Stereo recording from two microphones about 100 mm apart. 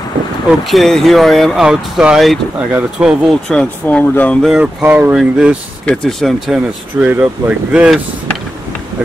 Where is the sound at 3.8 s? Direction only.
20° left (ahead or behind).